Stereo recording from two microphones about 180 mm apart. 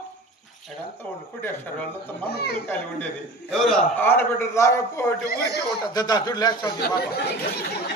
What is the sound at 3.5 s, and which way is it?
A man's voice, centre (ahead or behind).